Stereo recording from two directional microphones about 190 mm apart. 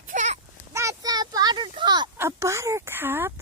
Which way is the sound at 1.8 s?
20° right (ahead or behind).